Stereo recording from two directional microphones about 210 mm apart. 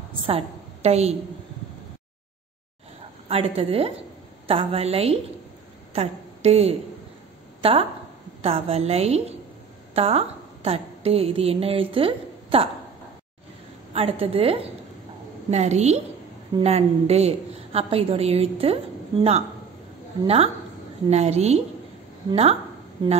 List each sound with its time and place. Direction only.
0.2 s a woman's voice: 25° right (ahead or behind)
3.3 s a woman's voice: 25° right (ahead or behind)
13.9 s a woman's voice: 30° right (ahead or behind)
21.1 s a woman's voice: 30° right (ahead or behind)